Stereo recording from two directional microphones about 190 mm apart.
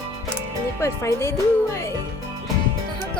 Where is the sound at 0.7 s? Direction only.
15° left (ahead or behind).